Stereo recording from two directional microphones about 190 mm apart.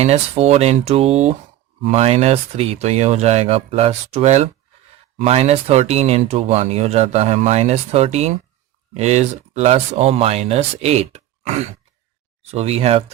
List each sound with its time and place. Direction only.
0.0 s speech: 35° right (ahead or behind)